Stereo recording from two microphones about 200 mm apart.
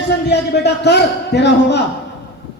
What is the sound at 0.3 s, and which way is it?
A man's voice, 55° left (ahead or behind).